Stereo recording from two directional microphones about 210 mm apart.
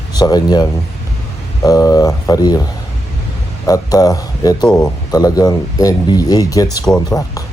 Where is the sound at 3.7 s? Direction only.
15° left (ahead or behind).